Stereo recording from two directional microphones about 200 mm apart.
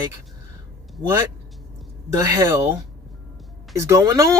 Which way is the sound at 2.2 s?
15° right (ahead or behind).